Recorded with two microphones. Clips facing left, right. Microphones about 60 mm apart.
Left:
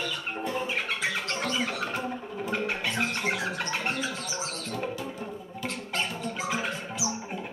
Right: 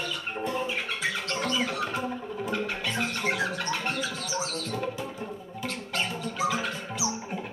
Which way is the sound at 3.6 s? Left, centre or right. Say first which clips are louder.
Even; centre.